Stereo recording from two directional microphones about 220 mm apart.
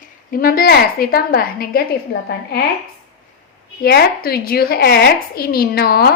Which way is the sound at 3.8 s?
45° left (ahead or behind).